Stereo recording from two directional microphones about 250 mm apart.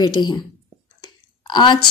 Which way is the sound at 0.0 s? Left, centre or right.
Centre.